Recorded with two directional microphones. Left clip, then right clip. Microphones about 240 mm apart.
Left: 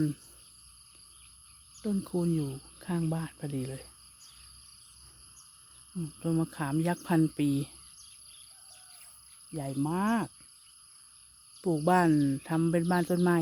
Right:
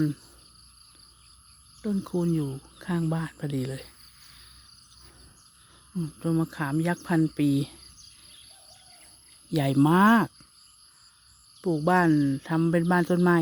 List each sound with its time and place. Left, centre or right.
1.8 s speech: centre
6.1 s speech: centre
9.5 s speech: right
11.6 s speech: centre